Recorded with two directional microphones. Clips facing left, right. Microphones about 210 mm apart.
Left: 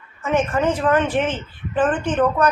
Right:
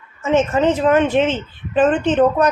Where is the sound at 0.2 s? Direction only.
25° right (ahead or behind).